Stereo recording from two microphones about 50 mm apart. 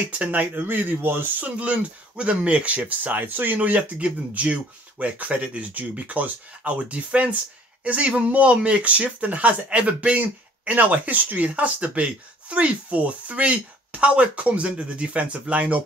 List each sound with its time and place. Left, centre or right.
0.2 s speech: right
1.4 s speech: right
3.5 s speech: right